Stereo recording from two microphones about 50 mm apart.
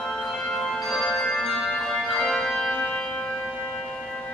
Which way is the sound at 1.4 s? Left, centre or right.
Centre.